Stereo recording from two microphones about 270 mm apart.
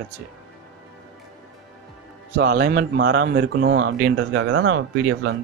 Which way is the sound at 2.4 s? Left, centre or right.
Right.